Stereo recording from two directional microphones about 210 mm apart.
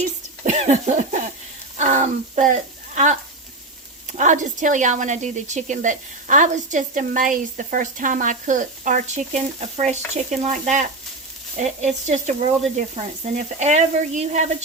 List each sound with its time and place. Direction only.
0.4 s a sound: 35° right (ahead or behind)
1.8 s speech: 35° right (ahead or behind)
4.2 s a woman's voice: 35° right (ahead or behind)